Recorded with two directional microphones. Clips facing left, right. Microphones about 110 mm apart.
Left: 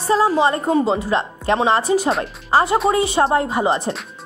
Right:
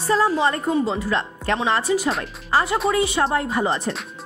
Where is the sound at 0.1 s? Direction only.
20° left (ahead or behind).